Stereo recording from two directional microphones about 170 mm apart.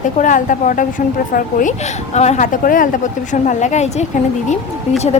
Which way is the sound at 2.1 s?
40° left (ahead or behind).